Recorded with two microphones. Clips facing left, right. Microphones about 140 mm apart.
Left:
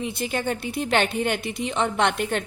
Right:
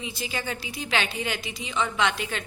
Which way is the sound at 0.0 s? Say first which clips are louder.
Left 6 dB; 60° left (ahead or behind).